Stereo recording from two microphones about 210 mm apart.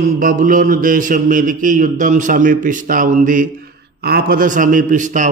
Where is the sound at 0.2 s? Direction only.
40° right (ahead or behind).